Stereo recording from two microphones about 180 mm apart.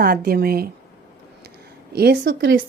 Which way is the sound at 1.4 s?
65° right (ahead or behind).